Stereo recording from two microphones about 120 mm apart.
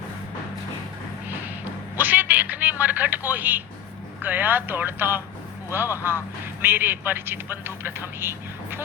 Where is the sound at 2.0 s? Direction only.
15° right (ahead or behind).